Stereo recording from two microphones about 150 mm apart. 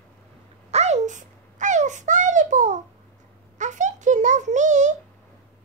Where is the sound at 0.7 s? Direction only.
45° right (ahead or behind).